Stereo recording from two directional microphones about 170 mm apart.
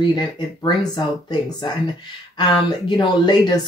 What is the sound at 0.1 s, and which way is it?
A woman's voice, 25° left (ahead or behind).